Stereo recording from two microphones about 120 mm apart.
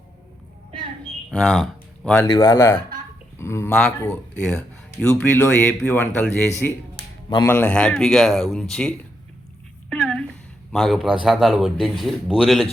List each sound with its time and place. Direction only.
1.3 s speech: 10° left (ahead or behind)
1.5 s a sound: centre (ahead or behind)
2.2 s speech: 35° left (ahead or behind)
3.7 s speech: 10° left (ahead or behind)
7.4 s speech: 15° left (ahead or behind)
9.9 s a sound: 5° left (ahead or behind)
10.7 s speech: 5° left (ahead or behind)